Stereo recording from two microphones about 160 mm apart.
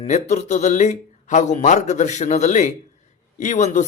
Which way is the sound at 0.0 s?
45° left (ahead or behind).